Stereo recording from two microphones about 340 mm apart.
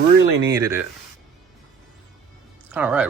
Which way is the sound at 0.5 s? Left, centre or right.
Centre.